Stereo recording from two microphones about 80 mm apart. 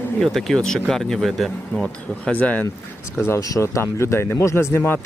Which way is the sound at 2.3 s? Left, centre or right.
Left.